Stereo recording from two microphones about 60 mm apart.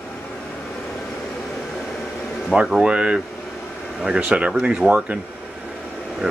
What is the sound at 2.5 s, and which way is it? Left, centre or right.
Speech, right.